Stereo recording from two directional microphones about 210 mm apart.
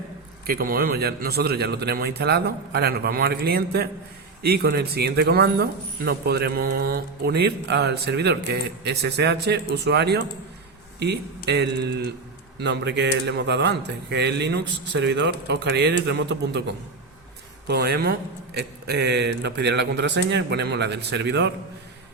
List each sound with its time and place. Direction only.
0.4 s a man's voice: 45° right (ahead or behind)
17.7 s a man's voice: 50° right (ahead or behind)